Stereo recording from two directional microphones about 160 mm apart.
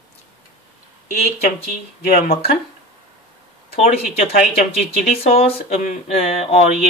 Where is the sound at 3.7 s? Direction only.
40° left (ahead or behind).